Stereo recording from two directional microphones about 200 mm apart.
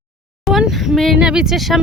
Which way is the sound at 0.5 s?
Centre (ahead or behind).